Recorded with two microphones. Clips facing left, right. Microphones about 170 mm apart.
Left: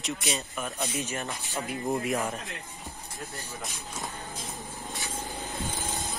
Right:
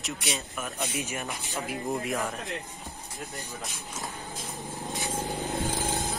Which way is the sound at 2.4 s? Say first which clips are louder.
Right 5 dB; 20° right (ahead or behind).